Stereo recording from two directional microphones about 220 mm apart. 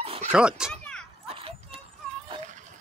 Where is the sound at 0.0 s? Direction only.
25° right (ahead or behind).